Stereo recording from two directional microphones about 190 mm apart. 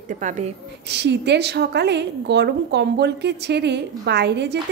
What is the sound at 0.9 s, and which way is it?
A woman's voice, 65° right (ahead or behind).